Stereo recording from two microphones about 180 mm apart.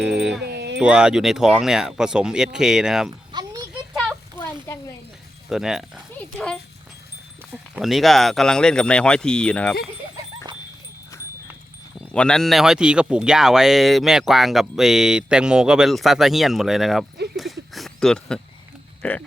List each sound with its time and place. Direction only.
0.0 s dog: 5° right (ahead or behind)
0.4 s dog: 65° right (ahead or behind)
0.8 s speech: 5° right (ahead or behind)
4.4 s a sound: 15° left (ahead or behind)
5.5 s speech: 5° right (ahead or behind)
7.5 s speech: centre (ahead or behind)
11.9 s speech: 5° left (ahead or behind)
17.3 s a sound: centre (ahead or behind)